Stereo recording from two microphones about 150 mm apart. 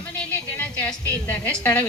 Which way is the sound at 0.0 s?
10° left (ahead or behind).